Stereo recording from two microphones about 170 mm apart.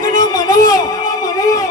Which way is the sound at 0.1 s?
20° left (ahead or behind).